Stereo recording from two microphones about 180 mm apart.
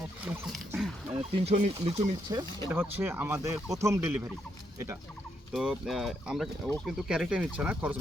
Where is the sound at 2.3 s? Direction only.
15° right (ahead or behind).